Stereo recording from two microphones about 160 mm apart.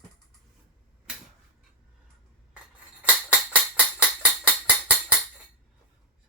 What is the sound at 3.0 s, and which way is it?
Music, 10° right (ahead or behind).